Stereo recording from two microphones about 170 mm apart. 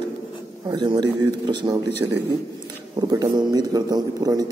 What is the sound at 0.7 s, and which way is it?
A man's voice, 25° right (ahead or behind).